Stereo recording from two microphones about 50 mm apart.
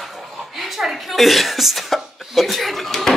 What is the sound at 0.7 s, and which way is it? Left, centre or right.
Speech, centre.